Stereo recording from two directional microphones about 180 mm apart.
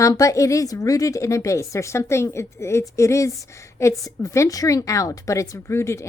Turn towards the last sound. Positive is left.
turn(degrees=15)  # may be behind; listen again after turning